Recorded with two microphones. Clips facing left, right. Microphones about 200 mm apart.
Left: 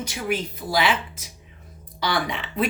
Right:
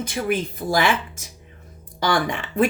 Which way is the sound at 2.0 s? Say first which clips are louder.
Right 4 dB; 50° right (ahead or behind).